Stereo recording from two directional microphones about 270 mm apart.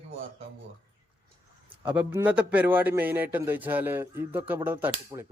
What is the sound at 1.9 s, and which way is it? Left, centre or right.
A man's voice, centre.